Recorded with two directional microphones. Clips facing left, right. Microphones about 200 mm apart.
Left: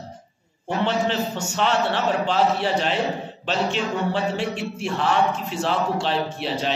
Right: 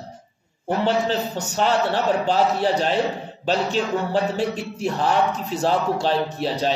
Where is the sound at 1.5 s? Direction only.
40° right (ahead or behind).